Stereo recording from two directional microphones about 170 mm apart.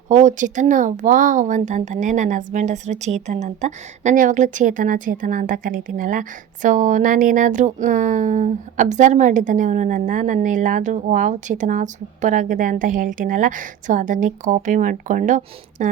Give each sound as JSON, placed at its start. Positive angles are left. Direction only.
{"t": 0.1, "sound": "speech", "side_deg": -45}